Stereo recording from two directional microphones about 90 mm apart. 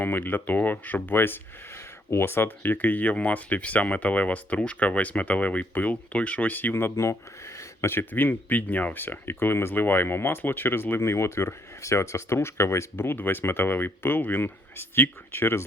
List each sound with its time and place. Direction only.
0.0 s speech: 20° left (ahead or behind)